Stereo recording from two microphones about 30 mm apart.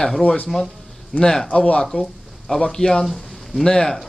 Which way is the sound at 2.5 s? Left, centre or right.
Left.